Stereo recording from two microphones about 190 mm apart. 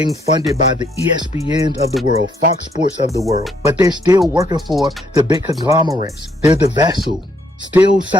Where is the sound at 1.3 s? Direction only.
15° right (ahead or behind).